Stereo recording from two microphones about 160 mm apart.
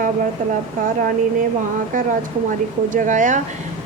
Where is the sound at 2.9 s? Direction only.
55° right (ahead or behind).